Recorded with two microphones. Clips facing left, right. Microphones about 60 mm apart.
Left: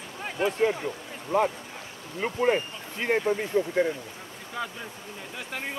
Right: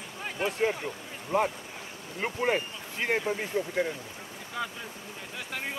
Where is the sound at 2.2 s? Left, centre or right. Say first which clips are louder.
Left 2 dB; right.